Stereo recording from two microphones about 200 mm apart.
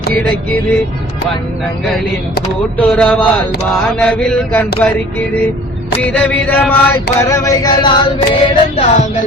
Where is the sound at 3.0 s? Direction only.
5° left (ahead or behind).